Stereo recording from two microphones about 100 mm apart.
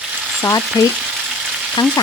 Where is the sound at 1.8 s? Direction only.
50° left (ahead or behind).